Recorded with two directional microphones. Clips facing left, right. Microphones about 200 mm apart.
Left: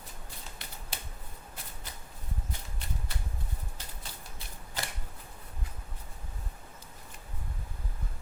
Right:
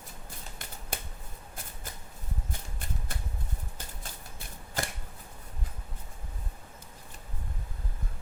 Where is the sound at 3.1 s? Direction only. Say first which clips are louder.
Right 2 dB; 50° right (ahead or behind).